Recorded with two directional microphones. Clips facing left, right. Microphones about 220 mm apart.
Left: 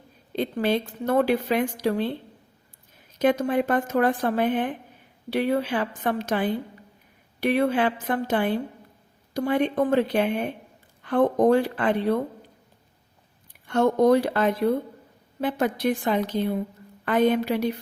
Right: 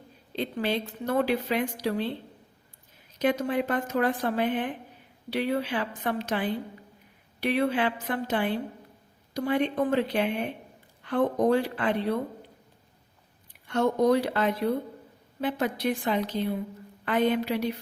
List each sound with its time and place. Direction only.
0.3 s a woman's voice: 50° left (ahead or behind)
3.2 s a woman's voice: 50° left (ahead or behind)
13.7 s a woman's voice: 50° left (ahead or behind)